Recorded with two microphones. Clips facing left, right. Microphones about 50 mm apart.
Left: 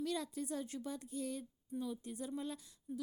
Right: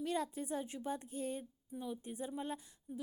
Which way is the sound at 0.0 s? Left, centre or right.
Right.